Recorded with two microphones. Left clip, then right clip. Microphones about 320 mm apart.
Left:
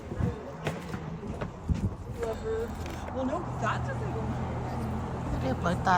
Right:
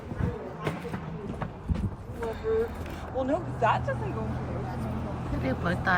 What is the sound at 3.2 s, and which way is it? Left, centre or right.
Vehicle, right.